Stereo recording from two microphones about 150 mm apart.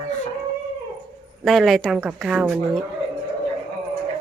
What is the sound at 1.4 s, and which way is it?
Speech, centre (ahead or behind).